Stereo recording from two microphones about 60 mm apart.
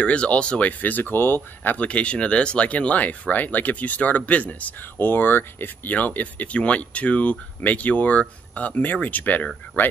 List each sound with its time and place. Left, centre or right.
0.0 s speech: centre
1.9 s speech: left
4.9 s speech: left